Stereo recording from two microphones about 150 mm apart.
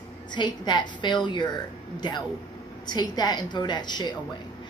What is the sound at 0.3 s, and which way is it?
A woman's voice, 30° left (ahead or behind).